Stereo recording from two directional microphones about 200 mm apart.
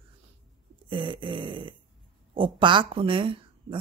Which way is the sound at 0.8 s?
25° right (ahead or behind).